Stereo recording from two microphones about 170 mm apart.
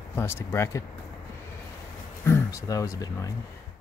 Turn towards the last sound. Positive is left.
turn(degrees=20)  # may be behind; listen again after turning